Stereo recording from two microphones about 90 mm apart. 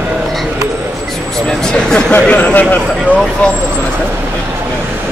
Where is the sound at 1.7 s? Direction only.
10° left (ahead or behind).